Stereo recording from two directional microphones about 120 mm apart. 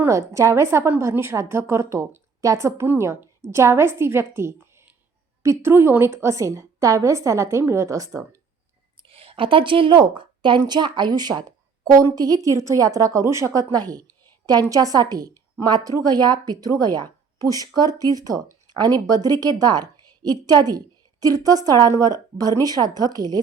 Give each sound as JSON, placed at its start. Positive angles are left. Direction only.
{"t": 0.0, "sound": "a woman's voice", "side_deg": -25}
{"t": 9.0, "sound": "a woman's voice", "side_deg": -50}